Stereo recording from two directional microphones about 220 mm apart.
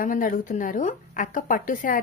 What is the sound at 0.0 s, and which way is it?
A woman's voice, 40° left (ahead or behind).